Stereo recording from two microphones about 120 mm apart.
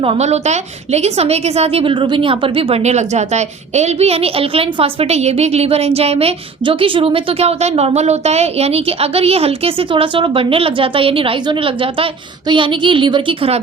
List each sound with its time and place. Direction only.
0.0 s a woman's voice: 60° right (ahead or behind)